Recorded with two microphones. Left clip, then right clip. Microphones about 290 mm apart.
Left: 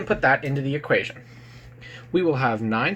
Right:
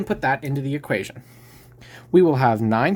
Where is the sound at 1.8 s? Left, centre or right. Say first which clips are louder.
Right 6 dB; right.